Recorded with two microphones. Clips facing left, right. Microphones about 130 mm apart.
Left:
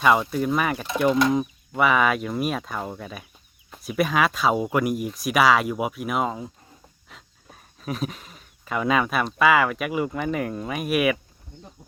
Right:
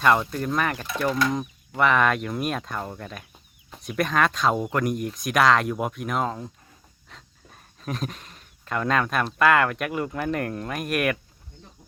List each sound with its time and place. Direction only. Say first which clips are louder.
0.0 s speech: left 1 dB; 5° left (ahead or behind)
0.9 s mechanisms: left 8 dB; 20° left (ahead or behind)
1.3 s speech: left 5 dB; 5° left (ahead or behind)